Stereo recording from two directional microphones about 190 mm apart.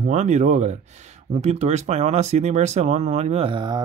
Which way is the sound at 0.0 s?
40° right (ahead or behind).